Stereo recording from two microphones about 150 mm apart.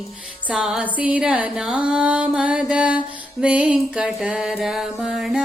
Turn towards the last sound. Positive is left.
turn(degrees=0)  # may be behind; listen again after turning